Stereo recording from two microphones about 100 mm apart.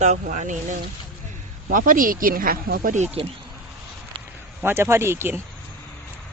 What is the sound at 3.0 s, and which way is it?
Speech, 90° right.